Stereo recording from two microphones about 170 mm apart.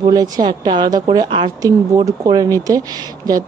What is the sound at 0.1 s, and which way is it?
A woman's voice, 20° right (ahead or behind).